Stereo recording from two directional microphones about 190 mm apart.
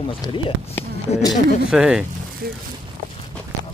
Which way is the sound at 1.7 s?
5° right (ahead or behind).